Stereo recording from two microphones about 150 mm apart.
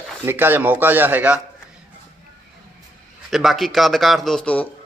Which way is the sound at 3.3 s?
Centre (ahead or behind).